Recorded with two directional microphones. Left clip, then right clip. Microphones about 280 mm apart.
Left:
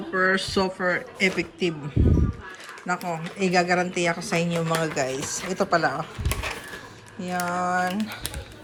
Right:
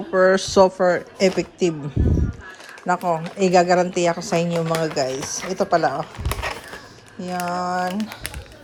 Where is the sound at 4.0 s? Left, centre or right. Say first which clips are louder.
Right 4 dB; right.